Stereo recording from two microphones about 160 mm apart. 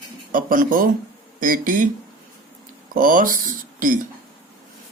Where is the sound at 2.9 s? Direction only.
60° right (ahead or behind).